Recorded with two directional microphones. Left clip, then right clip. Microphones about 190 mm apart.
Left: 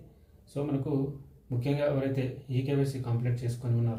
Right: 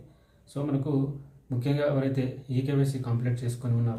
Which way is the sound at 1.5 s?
15° right (ahead or behind).